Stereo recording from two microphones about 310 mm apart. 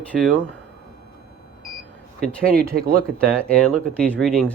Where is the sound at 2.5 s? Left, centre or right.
Right.